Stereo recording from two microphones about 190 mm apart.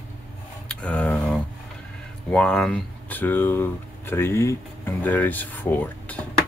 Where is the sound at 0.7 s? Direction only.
5° left (ahead or behind).